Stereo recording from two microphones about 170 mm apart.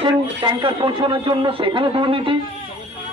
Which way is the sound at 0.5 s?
25° right (ahead or behind).